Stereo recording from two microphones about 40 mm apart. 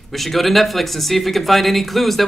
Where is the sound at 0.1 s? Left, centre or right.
Centre.